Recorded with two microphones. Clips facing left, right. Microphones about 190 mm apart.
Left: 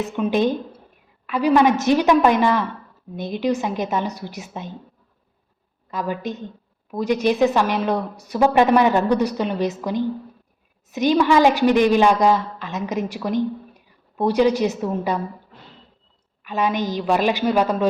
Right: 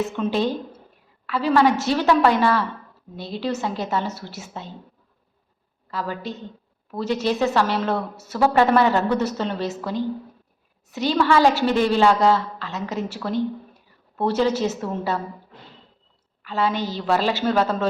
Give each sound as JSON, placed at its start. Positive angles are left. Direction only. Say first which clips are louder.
{"t": 0.0, "sound": "a woman's voice", "louder": "left 3 dB", "side_deg": 15}
{"t": 5.9, "sound": "a woman's voice", "louder": "left 3 dB", "side_deg": 20}
{"t": 16.4, "sound": "a woman's voice", "louder": "left 1 dB", "side_deg": 15}